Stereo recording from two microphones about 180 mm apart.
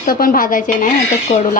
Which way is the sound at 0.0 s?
50° left (ahead or behind).